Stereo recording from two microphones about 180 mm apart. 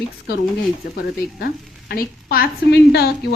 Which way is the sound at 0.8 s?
60° left (ahead or behind).